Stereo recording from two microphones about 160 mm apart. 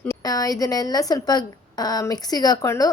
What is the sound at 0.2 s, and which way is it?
A woman's voice, 25° left (ahead or behind).